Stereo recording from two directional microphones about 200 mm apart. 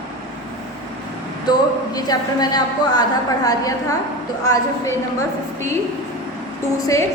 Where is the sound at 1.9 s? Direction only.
20° left (ahead or behind).